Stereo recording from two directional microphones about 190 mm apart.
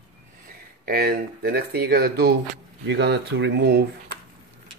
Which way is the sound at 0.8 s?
50° right (ahead or behind).